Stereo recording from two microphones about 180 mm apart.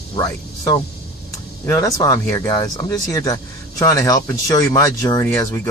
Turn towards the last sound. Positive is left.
turn(degrees=15)  # may be behind; listen again after turning